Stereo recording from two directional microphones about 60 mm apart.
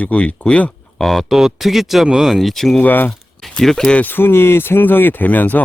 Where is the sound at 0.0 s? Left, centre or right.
Left.